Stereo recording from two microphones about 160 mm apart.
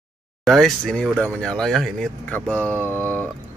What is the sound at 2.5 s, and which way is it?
Speech, 15° right (ahead or behind).